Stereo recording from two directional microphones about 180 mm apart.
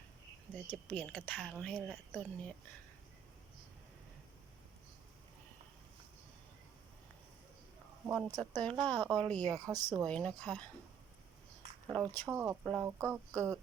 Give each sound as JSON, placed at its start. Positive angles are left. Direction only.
{"t": 0.7, "sound": "a woman's voice", "side_deg": 5}
{"t": 8.0, "sound": "a woman's voice", "side_deg": -15}
{"t": 10.1, "sound": "speech", "side_deg": 5}
{"t": 11.9, "sound": "a woman's voice", "side_deg": 5}
{"t": 12.3, "sound": "speech", "side_deg": -10}